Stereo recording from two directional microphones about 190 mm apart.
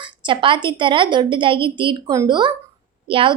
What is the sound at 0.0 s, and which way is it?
A woman's voice, 25° right (ahead or behind).